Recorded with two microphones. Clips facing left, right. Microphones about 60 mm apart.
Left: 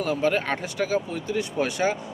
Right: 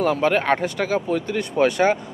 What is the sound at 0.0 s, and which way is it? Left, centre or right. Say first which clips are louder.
Speech: right 5 dB; right.